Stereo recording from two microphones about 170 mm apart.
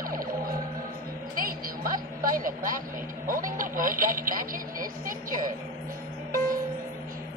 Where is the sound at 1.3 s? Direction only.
55° right (ahead or behind).